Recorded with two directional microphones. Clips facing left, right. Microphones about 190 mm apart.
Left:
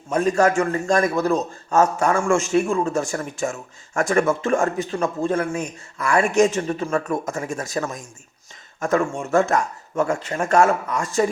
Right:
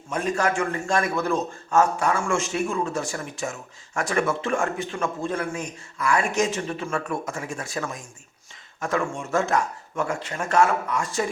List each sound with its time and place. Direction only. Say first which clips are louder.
0.1 s a man's voice: left 6 dB; 45° left (ahead or behind)